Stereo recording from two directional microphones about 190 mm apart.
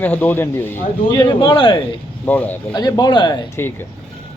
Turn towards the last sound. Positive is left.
turn(degrees=20)  # may be behind; listen again after turning